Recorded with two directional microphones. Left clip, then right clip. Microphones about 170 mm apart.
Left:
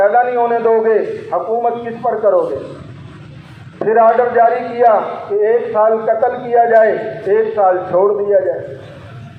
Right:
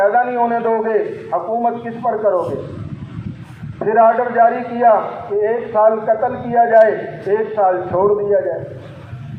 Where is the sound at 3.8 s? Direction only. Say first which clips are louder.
Left 2 dB; 40° left (ahead or behind).